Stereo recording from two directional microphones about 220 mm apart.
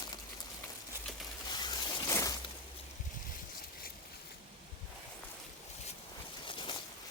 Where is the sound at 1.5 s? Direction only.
20° left (ahead or behind).